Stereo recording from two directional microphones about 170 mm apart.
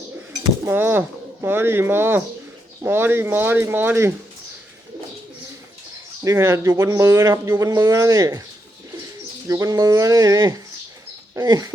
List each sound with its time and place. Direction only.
0.6 s speech: 10° right (ahead or behind)
6.2 s speech: 15° right (ahead or behind)
9.5 s speech: 20° right (ahead or behind)